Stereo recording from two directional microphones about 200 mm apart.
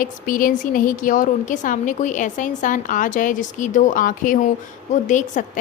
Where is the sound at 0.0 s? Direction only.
45° left (ahead or behind).